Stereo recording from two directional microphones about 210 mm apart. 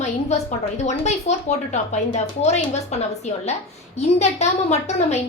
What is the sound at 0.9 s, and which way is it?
A woman's voice, 30° left (ahead or behind).